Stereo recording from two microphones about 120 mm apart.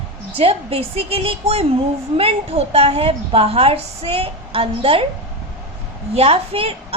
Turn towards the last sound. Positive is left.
turn(degrees=-55)  # may be behind; listen again after turning